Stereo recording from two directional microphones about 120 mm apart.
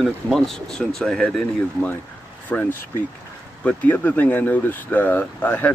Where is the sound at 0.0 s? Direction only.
Centre (ahead or behind).